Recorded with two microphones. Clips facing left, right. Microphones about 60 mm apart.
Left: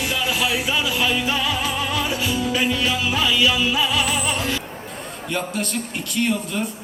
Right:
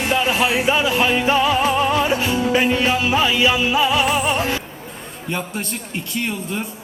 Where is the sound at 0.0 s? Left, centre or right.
Right.